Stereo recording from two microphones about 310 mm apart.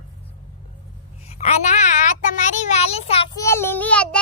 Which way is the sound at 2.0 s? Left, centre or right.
Left.